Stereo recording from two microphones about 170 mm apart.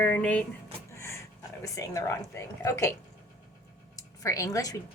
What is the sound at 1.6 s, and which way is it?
A woman's voice, 20° left (ahead or behind).